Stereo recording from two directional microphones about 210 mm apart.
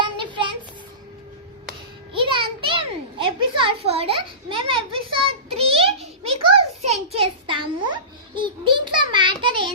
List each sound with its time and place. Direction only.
0.0 s child singing: 25° right (ahead or behind)
2.1 s a sound: 25° right (ahead or behind)
8.4 s child singing: 25° right (ahead or behind)